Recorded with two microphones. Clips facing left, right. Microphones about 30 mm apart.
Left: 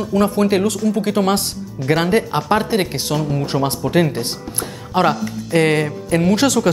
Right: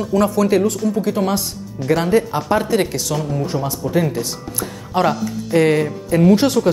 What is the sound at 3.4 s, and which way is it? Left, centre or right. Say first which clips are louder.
Speech: left 2 dB; left.